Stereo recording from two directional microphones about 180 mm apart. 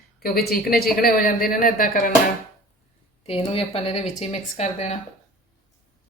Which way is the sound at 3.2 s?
35° left (ahead or behind).